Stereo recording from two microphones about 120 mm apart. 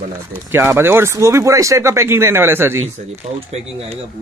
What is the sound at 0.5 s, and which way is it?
Speech, 20° right (ahead or behind).